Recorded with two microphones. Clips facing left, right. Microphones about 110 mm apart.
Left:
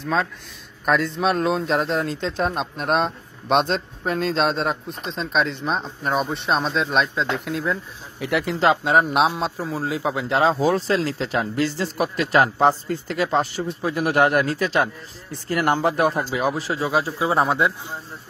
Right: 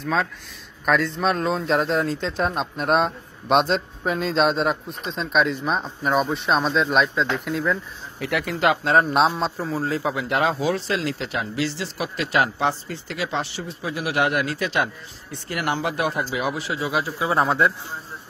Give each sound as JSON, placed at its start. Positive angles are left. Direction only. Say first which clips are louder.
{"t": 0.0, "sound": "speech", "louder": "left 1 dB", "side_deg": 0}
{"t": 8.2, "sound": "speech", "louder": "left 2 dB", "side_deg": 25}
{"t": 8.8, "sound": "speech", "louder": "even", "side_deg": 5}
{"t": 10.1, "sound": "speech", "louder": "left 3 dB", "side_deg": 30}